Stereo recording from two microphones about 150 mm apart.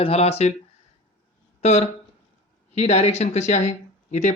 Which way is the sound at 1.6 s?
45° left (ahead or behind).